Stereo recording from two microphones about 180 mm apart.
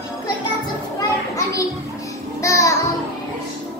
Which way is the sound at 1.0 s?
20° left (ahead or behind).